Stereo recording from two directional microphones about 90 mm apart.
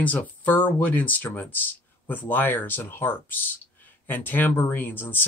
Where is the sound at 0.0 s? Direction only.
20° left (ahead or behind).